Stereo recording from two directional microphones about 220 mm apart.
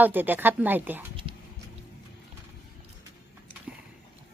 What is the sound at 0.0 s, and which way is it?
Speech, 10° right (ahead or behind).